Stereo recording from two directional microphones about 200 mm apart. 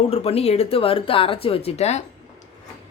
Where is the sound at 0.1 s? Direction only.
30° left (ahead or behind).